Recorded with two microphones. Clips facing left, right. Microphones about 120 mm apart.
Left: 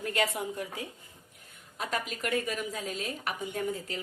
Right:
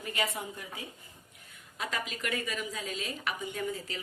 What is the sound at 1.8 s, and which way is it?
A woman's voice, 45° left (ahead or behind).